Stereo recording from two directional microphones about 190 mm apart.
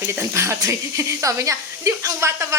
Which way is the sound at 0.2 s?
15° right (ahead or behind).